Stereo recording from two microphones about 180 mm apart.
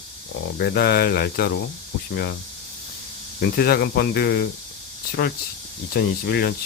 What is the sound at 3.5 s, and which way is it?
Speech, 60° left (ahead or behind).